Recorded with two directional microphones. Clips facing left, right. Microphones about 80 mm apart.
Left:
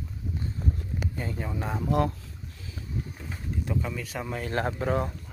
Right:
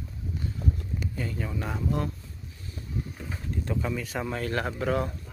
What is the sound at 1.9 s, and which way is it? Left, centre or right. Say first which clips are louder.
Speech: left 6 dB; left.